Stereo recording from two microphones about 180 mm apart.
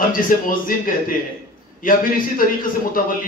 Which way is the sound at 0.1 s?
50° left (ahead or behind).